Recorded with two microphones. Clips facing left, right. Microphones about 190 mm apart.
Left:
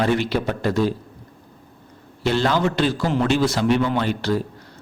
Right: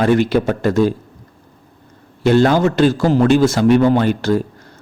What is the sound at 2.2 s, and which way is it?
A man's voice, 50° right (ahead or behind).